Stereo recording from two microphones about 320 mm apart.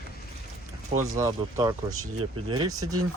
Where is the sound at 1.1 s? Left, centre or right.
Centre.